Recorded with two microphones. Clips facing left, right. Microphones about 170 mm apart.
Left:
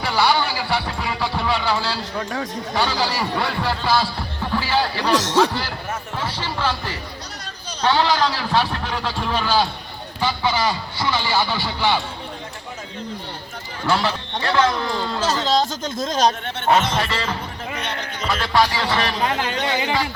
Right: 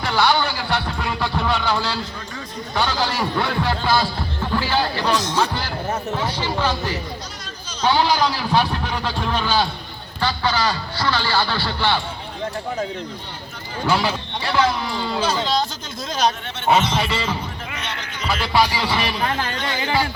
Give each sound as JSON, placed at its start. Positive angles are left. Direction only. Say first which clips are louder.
{"t": 0.0, "sound": "music", "louder": "even", "side_deg": 5}
{"t": 2.1, "sound": "a man's voice", "louder": "left 8 dB", "side_deg": 70}
{"t": 2.7, "sound": "a man's voice", "louder": "even", "side_deg": 5}
{"t": 5.1, "sound": "speech", "louder": "left 6 dB", "side_deg": 80}
{"t": 6.1, "sound": "a man's voice", "louder": "right 3 dB", "side_deg": 0}
{"t": 10.2, "sound": "speech", "louder": "even", "side_deg": 20}
{"t": 13.8, "sound": "speech", "louder": "even", "side_deg": 0}
{"t": 15.4, "sound": "speech", "louder": "left 3 dB", "side_deg": 40}
{"t": 17.0, "sound": "a man's voice", "louder": "right 1 dB", "side_deg": -5}
{"t": 19.2, "sound": "speech", "louder": "left 2 dB", "side_deg": 20}